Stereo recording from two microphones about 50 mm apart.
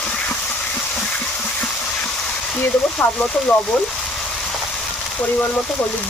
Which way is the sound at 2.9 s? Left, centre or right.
Left.